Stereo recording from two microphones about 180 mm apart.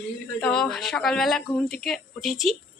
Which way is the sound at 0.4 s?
5° left (ahead or behind).